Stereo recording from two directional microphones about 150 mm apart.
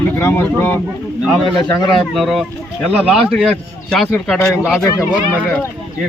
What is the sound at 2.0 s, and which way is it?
A man's voice, centre (ahead or behind).